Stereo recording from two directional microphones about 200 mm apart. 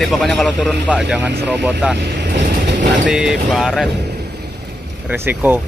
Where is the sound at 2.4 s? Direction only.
55° right (ahead or behind).